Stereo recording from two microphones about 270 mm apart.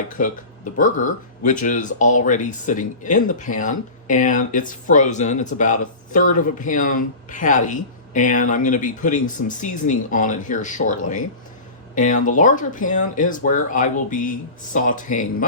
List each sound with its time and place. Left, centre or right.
0.2 s speech: left